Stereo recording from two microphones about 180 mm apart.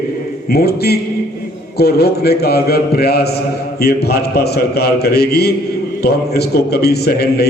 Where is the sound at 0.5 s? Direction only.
60° left (ahead or behind).